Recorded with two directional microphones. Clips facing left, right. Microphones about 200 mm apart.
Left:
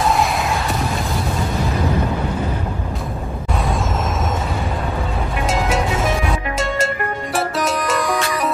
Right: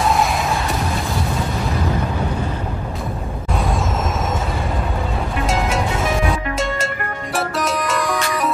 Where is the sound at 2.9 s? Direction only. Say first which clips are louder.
Even; centre (ahead or behind).